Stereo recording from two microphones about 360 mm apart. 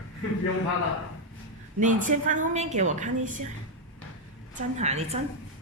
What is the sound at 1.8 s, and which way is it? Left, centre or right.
A woman's voice, right.